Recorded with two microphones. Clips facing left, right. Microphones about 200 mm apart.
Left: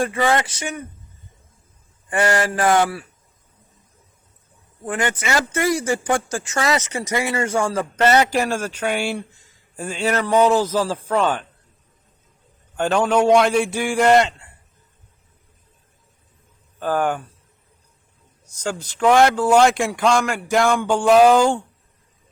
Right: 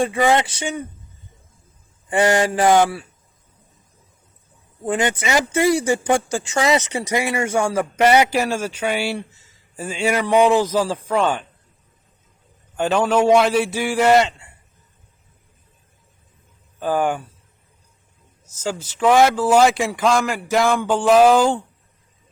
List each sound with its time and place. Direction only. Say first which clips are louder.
0.2 s speech: right 3 dB; 15° right (ahead or behind)
0.4 s speech: right 3 dB; 30° right (ahead or behind)
2.0 s speech: right 3 dB; 20° right (ahead or behind)
4.9 s speech: right 2 dB; 25° right (ahead or behind)
6.5 s speech: right 3 dB; 15° right (ahead or behind)
10.9 s speech: even; centre (ahead or behind)
12.7 s speech: even; 5° right (ahead or behind)
16.8 s speech: right 1 dB; 10° right (ahead or behind)
18.5 s speech: right 1 dB; 5° right (ahead or behind)